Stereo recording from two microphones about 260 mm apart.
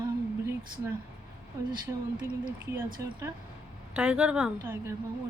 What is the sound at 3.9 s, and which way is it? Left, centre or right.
Speech, centre.